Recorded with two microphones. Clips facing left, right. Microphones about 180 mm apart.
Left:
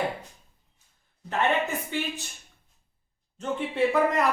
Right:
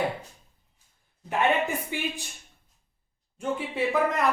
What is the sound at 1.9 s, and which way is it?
Speech, 15° right (ahead or behind).